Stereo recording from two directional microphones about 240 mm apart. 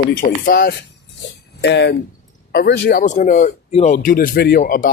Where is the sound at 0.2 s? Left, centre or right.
Left.